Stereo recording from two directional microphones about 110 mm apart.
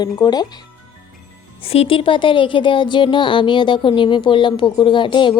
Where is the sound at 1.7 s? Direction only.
55° left (ahead or behind).